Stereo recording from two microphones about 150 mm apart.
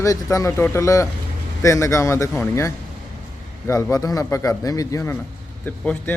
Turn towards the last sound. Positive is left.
turn(degrees=10)  # may be behind; listen again after turning